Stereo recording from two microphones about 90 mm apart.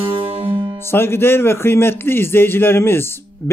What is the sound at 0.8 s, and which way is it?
A man's voice, 25° left (ahead or behind).